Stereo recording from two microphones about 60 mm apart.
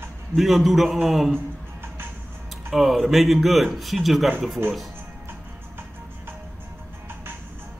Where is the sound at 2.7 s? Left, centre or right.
Centre.